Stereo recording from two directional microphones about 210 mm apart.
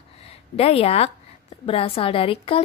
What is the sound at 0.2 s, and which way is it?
A woman's voice, 30° left (ahead or behind).